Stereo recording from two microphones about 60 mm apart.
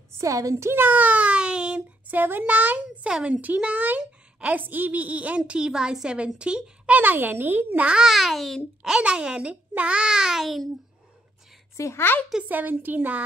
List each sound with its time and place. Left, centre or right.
0.2 s a woman's voice: right
0.7 s a child's voice: right; by 1.8 s centre
2.0 s a woman's voice: right
3.1 s a child's voice: centre
5.5 s a child's voice: centre
7.0 s a child's voice: right
8.0 s a child's voice: centre
8.8 s a child's voice: centre
11.7 s speech: left
12.4 s a child's voice: right